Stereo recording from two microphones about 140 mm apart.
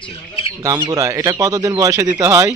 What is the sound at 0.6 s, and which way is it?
A man's voice, 25° right (ahead or behind).